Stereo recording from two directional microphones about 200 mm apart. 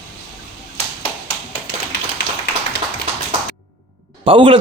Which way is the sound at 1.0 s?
30° left (ahead or behind).